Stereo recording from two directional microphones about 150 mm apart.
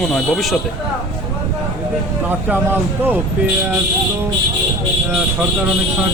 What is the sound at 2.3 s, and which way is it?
Speech, 15° right (ahead or behind).